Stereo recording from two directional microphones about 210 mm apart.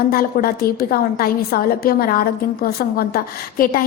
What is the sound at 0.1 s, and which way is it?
A woman's voice, 45° left (ahead or behind).